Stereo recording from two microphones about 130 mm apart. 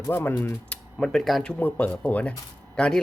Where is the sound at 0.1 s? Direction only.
15° left (ahead or behind).